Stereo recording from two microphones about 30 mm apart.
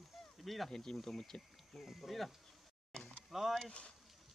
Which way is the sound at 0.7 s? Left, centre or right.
Centre.